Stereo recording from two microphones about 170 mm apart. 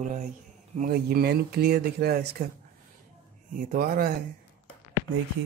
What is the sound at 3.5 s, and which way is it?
Speech, 55° right (ahead or behind).